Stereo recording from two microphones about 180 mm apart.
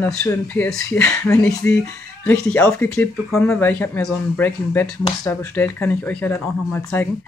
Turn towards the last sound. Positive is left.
turn(degrees=10)  # may be behind; listen again after turning